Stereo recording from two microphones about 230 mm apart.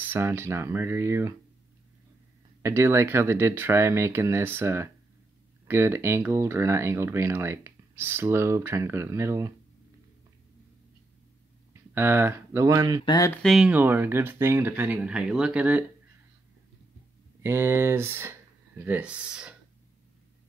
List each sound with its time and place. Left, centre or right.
0.0 s speech: centre
2.6 s speech: centre
11.9 s speech: centre
13.0 s speech: centre
13.4 s speech: centre
17.4 s speech: centre